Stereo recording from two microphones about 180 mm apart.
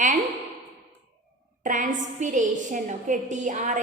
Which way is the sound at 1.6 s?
45° right (ahead or behind).